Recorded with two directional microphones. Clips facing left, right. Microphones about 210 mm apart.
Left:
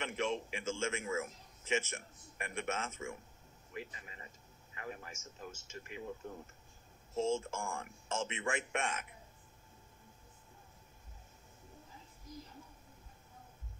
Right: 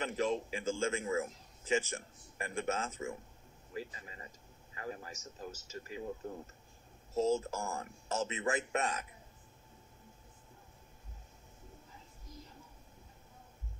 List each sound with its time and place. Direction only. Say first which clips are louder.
0.0 s a man's voice: right 3 dB; 35° right (ahead or behind)
7.2 s a man's voice: right 3 dB; 40° right (ahead or behind)